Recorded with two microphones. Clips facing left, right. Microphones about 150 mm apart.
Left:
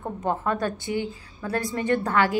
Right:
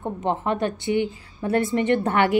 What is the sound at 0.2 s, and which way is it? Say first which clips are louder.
A woman's voice: right 2 dB; 25° right (ahead or behind).